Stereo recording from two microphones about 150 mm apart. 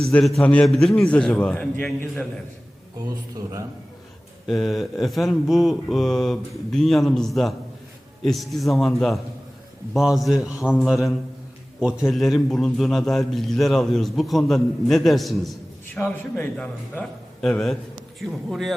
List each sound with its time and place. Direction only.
0.1 s a man's voice: 5° left (ahead or behind)
3.0 s a man's voice: 25° right (ahead or behind)
4.4 s a man's voice: centre (ahead or behind)
12.0 s a man's voice: centre (ahead or behind)
16.0 s a man's voice: 15° left (ahead or behind); by 18.7 s 5° right (ahead or behind)